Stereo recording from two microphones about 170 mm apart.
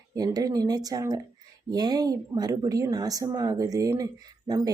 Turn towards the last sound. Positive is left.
turn(degrees=-20)  # may be behind; listen again after turning